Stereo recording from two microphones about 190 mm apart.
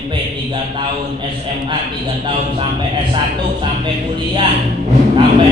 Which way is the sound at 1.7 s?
25° right (ahead or behind).